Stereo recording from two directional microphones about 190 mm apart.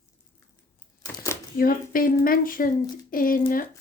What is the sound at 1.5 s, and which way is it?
Speech, 50° left (ahead or behind).